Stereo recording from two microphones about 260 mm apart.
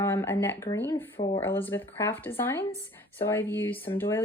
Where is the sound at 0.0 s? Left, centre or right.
Centre.